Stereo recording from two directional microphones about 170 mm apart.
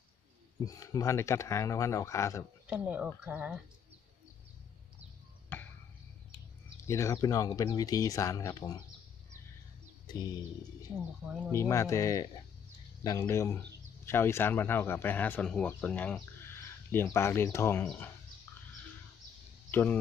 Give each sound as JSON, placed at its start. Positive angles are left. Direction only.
{"t": 0.7, "sound": "a man's voice", "side_deg": 20}
{"t": 2.6, "sound": "speech", "side_deg": -5}
{"t": 5.5, "sound": "tick-tock", "side_deg": 10}
{"t": 6.9, "sound": "speech", "side_deg": 15}
{"t": 10.1, "sound": "speech", "side_deg": 25}
{"t": 11.5, "sound": "a man's voice", "side_deg": 15}
{"t": 19.7, "sound": "speech", "side_deg": 10}